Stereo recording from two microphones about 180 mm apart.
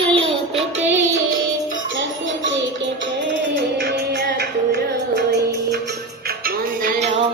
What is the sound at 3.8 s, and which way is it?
Music, 60° right (ahead or behind).